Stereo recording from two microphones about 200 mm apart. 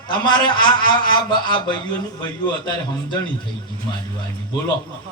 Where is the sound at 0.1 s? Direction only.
20° left (ahead or behind).